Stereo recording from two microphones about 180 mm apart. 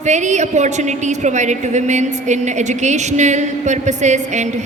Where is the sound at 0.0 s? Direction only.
40° right (ahead or behind).